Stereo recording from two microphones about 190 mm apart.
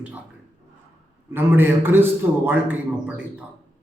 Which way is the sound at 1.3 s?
10° right (ahead or behind).